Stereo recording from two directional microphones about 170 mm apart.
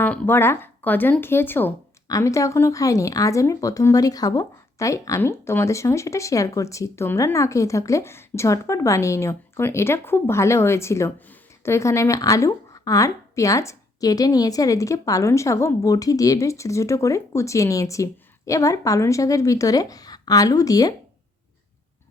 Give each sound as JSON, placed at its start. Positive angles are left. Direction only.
{"t": 0.0, "sound": "speech", "side_deg": 10}